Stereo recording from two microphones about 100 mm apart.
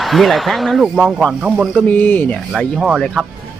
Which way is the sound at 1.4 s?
10° right (ahead or behind).